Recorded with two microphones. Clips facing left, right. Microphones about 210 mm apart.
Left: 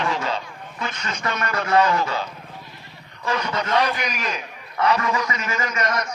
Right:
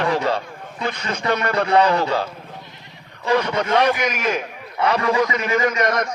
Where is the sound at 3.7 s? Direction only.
50° right (ahead or behind).